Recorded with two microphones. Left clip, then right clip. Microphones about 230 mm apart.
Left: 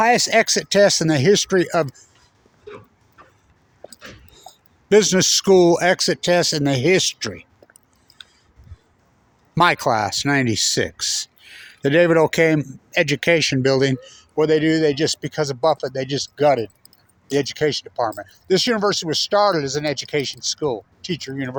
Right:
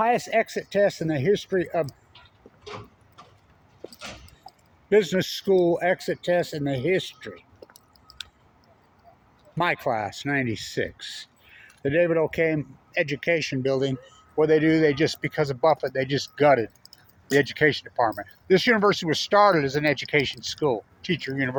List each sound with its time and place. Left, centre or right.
0.0 s speech: left
2.6 s tick-tock: right
4.9 s speech: left
9.6 s speech: left
14.4 s speech: left; by 21.5 s centre